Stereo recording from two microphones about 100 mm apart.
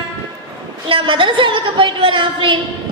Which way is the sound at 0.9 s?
60° right (ahead or behind).